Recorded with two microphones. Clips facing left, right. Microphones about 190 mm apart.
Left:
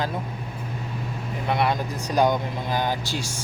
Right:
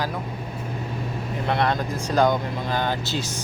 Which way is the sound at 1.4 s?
10° left (ahead or behind).